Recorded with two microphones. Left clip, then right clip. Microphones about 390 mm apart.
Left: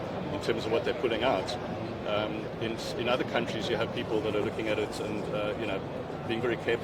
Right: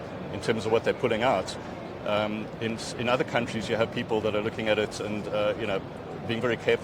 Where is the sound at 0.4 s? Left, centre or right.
Right.